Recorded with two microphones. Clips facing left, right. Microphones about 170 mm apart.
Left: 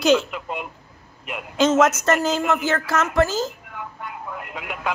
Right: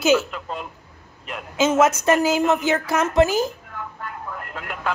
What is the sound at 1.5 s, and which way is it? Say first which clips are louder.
A woman's voice: even; 5° right (ahead or behind).